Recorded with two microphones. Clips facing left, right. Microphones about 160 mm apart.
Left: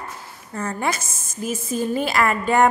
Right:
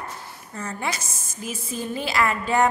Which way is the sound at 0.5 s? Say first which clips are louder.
Left 5 dB; 50° left (ahead or behind).